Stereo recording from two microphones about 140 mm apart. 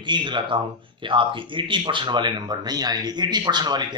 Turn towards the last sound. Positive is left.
turn(degrees=-30)  # may be behind; listen again after turning